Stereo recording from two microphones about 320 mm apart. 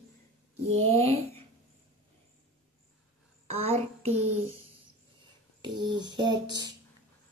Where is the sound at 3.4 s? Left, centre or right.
Centre.